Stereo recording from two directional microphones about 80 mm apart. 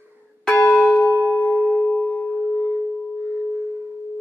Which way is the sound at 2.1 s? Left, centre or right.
Centre.